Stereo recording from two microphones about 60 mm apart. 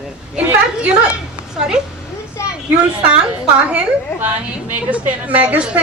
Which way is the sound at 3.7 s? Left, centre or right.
Right.